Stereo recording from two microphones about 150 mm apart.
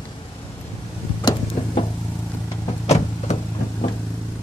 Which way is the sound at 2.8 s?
45° left (ahead or behind).